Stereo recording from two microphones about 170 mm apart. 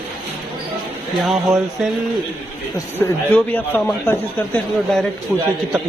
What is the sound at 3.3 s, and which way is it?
A man's voice, 10° left (ahead or behind).